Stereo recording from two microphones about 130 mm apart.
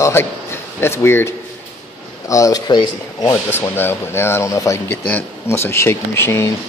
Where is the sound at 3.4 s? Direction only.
15° left (ahead or behind).